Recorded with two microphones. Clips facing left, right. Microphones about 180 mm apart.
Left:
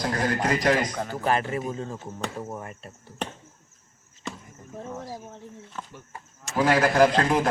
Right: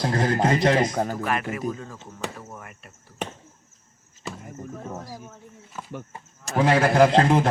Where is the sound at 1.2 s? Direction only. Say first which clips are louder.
Left 2 dB; 30° left (ahead or behind).